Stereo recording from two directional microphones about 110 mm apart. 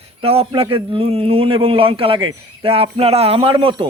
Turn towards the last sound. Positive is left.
turn(degrees=-50)  # may be behind; listen again after turning